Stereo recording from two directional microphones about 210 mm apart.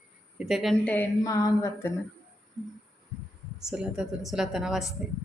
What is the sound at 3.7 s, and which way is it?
A woman's voice, centre (ahead or behind).